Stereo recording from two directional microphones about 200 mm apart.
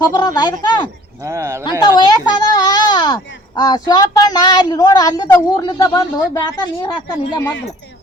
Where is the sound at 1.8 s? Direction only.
20° left (ahead or behind).